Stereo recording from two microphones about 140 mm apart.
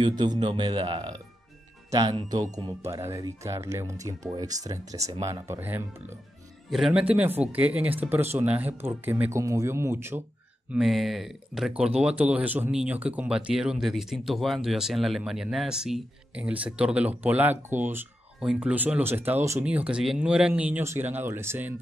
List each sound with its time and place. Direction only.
0.2 s a man's voice: 30° right (ahead or behind); by 6.1 s 15° right (ahead or behind)
6.7 s speech: 5° right (ahead or behind)
10.7 s speech: centre (ahead or behind)